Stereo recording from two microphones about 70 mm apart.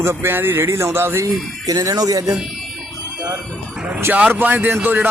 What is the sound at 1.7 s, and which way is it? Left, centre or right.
Speech, right.